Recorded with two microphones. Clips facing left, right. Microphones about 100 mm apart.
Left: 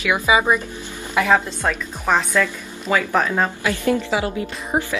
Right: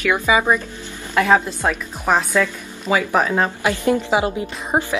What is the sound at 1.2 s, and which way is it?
Speech, 15° right (ahead or behind).